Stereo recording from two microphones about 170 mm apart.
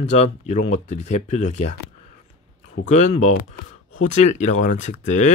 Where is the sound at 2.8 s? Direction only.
45° left (ahead or behind).